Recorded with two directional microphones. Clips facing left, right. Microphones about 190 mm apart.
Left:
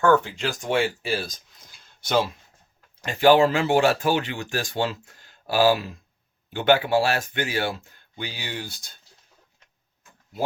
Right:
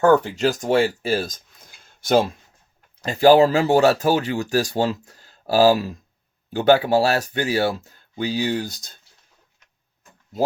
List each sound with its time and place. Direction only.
0.0 s speech: 40° right (ahead or behind)
1.8 s a sound: 45° right (ahead or behind)
3.0 s speech: 35° right (ahead or behind)